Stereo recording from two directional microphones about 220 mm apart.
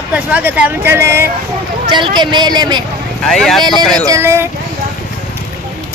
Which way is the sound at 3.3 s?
Centre (ahead or behind).